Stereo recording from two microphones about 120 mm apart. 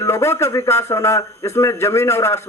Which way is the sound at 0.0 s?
20° left (ahead or behind).